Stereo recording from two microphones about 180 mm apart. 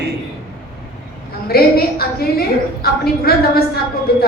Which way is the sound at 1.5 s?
60° left (ahead or behind).